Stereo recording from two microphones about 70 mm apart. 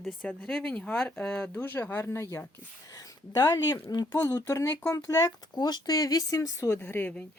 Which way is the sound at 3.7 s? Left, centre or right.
Left.